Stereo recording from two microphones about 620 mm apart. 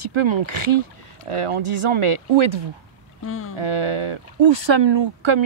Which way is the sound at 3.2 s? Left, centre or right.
Centre.